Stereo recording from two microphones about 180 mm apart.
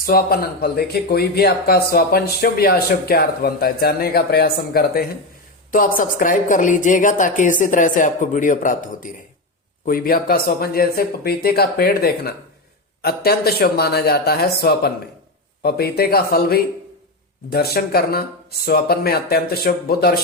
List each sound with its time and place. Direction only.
0.0 s a woman's voice: 55° left (ahead or behind)